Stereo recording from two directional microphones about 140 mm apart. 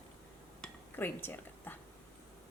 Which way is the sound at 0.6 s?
15° left (ahead or behind).